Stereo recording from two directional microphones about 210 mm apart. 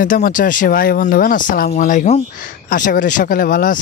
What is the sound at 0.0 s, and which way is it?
Speech, 40° left (ahead or behind).